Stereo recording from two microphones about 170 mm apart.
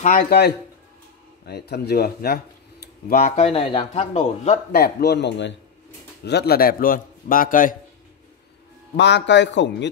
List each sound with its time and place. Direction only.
0.0 s a man's voice: 55° left (ahead or behind)
3.3 s speech: 35° left (ahead or behind)
4.7 s speech: 70° left (ahead or behind)
6.2 s a man's voice: 70° left (ahead or behind); by 7.7 s 55° left (ahead or behind)
8.9 s a man's voice: 90° left